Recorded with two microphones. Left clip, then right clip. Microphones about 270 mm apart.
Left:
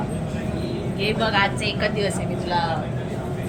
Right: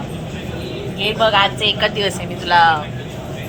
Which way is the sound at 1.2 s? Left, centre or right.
Centre.